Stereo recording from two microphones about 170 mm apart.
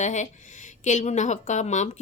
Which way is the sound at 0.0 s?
45° left (ahead or behind).